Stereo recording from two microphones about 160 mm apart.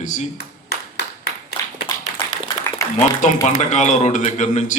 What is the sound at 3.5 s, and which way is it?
A man's voice, 50° left (ahead or behind).